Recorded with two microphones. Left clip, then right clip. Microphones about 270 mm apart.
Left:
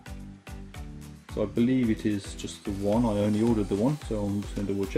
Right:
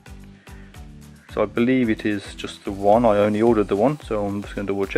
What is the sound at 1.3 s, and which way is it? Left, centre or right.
Speech, centre.